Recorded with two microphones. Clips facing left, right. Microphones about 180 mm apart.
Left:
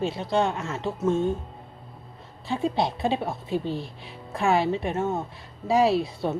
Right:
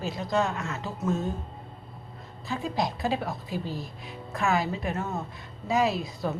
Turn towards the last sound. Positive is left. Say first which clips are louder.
# left 5 dB
turn(degrees=30)  # may be behind; listen again after turning